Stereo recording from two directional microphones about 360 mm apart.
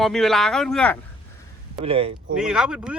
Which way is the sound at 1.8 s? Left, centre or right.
Centre.